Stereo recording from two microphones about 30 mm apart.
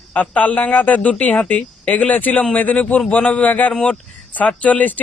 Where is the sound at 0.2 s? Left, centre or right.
Left.